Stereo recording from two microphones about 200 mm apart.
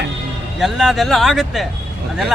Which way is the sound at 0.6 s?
Centre (ahead or behind).